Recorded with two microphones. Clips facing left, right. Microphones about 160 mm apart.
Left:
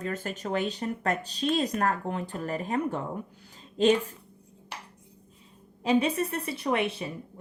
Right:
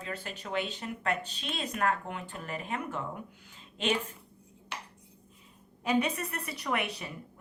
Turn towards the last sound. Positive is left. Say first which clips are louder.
# left 6 dB
turn(degrees=30)  # may be behind; listen again after turning